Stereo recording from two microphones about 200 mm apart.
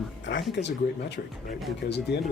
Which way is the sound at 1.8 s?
60° left (ahead or behind).